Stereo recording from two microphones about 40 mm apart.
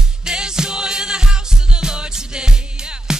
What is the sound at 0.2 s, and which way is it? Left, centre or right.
Music, centre.